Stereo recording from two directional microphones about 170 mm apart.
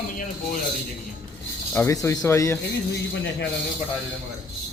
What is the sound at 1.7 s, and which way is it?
Speech, 10° left (ahead or behind).